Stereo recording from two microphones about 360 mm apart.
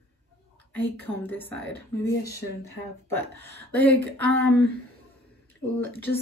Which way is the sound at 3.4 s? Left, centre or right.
Right.